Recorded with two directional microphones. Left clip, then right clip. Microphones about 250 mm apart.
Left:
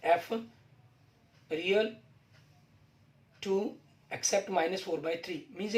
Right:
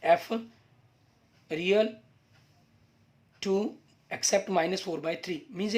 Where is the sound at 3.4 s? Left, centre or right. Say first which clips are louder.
Right 3 dB; right.